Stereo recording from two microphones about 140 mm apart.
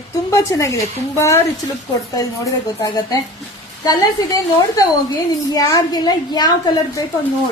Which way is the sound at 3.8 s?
25° left (ahead or behind).